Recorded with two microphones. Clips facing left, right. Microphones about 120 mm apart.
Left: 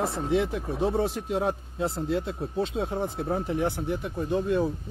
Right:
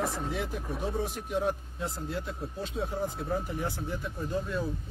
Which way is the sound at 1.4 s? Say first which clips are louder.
Left 3 dB; 30° left (ahead or behind).